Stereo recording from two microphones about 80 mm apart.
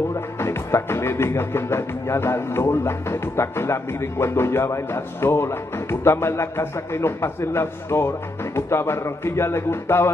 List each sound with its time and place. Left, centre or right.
0.1 s music: left